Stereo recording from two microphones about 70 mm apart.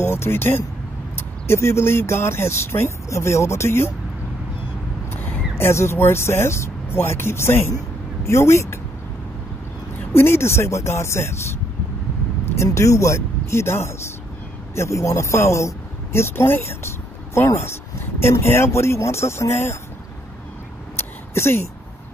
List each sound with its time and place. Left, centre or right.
0.0 s speech: left
5.1 s a sound: left
5.6 s speech: left
9.9 s speech: left
12.7 s speech: left
20.9 s a sound: left